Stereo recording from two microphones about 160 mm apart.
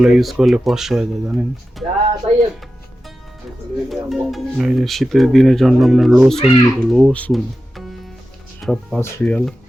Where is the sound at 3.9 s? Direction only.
Centre (ahead or behind).